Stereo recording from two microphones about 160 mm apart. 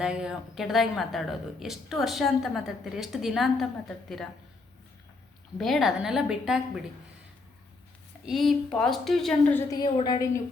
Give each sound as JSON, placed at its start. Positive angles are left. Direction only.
{"t": 0.0, "sound": "speech", "side_deg": -5}
{"t": 5.5, "sound": "speech", "side_deg": 0}
{"t": 8.2, "sound": "speech", "side_deg": 0}
{"t": 9.6, "sound": "a woman's voice", "side_deg": 25}